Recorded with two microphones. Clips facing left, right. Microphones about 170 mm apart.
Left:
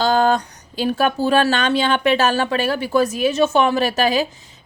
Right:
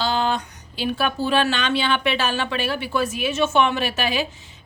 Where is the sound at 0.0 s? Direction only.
45° left (ahead or behind).